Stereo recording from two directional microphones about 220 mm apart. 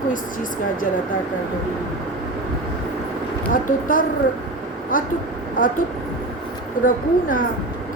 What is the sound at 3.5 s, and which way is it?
A woman's voice, 35° left (ahead or behind).